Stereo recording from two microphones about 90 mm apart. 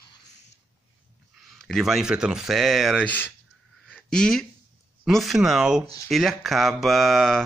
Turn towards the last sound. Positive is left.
turn(degrees=5)  # may be behind; listen again after turning